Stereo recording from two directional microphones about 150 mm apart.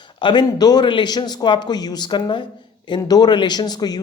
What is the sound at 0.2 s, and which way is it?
A man's voice, 30° left (ahead or behind).